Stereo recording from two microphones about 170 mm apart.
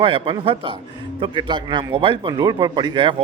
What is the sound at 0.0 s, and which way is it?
A man's voice, 30° right (ahead or behind).